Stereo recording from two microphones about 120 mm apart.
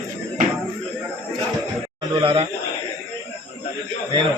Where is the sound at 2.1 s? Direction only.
45° right (ahead or behind).